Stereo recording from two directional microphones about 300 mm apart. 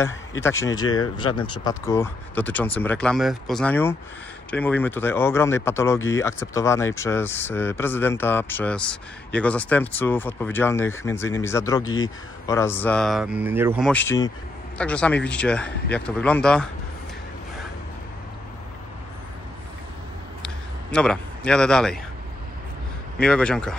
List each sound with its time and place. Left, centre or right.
0.0 s speech: centre
20.4 s a sound: centre
23.2 s speech: centre